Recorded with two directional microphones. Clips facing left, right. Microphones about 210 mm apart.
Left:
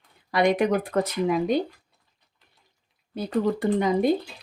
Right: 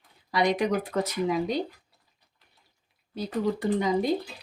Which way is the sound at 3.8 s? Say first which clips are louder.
Left 2 dB; 55° left (ahead or behind).